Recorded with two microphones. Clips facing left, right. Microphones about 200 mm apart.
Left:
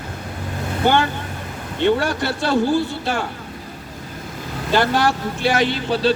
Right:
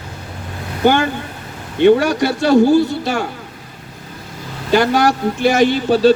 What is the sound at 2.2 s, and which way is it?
Speech, 45° right (ahead or behind).